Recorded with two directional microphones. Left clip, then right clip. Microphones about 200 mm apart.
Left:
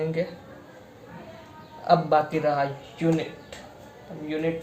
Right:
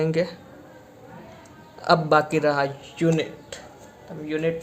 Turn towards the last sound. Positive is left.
turn(degrees=-40)  # may be behind; listen again after turning